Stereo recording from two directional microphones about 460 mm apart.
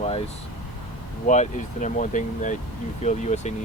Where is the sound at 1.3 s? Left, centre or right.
Centre.